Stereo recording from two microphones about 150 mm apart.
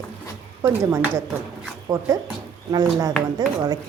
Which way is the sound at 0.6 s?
20° right (ahead or behind).